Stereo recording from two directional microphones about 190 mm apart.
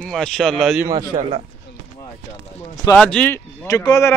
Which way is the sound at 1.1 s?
30° right (ahead or behind).